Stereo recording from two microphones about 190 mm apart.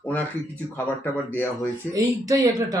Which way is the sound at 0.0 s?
10° left (ahead or behind).